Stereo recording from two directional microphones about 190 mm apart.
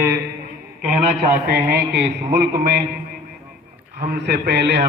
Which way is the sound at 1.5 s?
60° right (ahead or behind).